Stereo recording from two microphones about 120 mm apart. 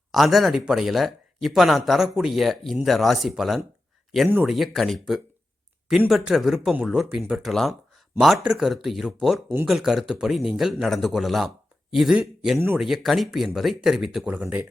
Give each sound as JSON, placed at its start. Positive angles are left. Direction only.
{"t": 0.1, "sound": "speech", "side_deg": 0}
{"t": 12.5, "sound": "speech", "side_deg": -15}
{"t": 12.8, "sound": "speech", "side_deg": 0}
{"t": 14.3, "sound": "speech", "side_deg": -15}